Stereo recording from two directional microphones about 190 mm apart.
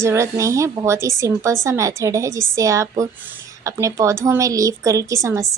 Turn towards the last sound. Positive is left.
turn(degrees=-15)  # may be behind; listen again after turning